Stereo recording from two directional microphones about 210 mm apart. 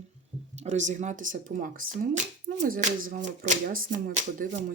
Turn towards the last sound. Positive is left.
turn(degrees=-40)  # may be behind; listen again after turning